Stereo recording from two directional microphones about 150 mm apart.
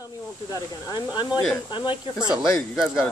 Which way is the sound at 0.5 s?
25° left (ahead or behind).